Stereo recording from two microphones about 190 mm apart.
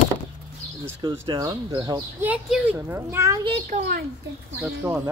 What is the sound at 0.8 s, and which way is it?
Speech, 20° right (ahead or behind).